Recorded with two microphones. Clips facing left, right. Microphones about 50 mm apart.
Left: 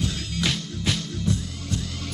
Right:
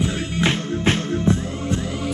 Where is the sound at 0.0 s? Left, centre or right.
Right.